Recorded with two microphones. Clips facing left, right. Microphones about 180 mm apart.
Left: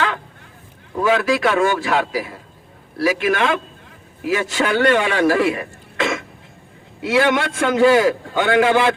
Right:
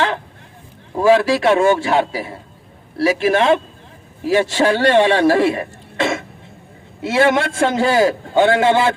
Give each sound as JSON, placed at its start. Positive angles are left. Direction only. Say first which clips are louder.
{"t": 1.0, "sound": "a man's voice", "louder": "right 4 dB", "side_deg": -35}